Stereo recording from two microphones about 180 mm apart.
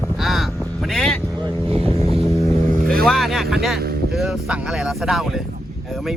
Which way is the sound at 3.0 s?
Centre (ahead or behind).